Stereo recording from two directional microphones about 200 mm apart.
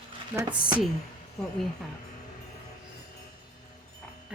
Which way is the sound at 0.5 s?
5° right (ahead or behind).